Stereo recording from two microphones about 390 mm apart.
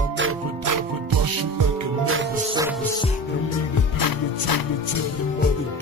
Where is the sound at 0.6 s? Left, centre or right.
Right.